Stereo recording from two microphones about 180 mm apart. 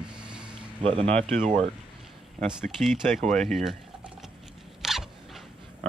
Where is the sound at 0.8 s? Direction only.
30° right (ahead or behind).